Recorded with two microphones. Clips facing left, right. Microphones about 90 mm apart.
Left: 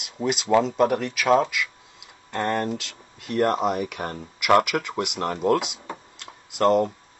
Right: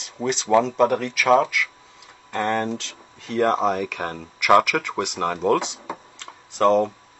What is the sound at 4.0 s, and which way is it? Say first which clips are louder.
Speech: right 2 dB; 40° right (ahead or behind).